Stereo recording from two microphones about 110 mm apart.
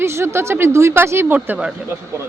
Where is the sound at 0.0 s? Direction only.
25° right (ahead or behind).